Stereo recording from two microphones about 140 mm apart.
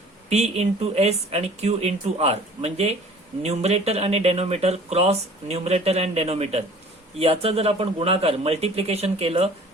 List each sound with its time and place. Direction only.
0.3 s speech: 50° right (ahead or behind)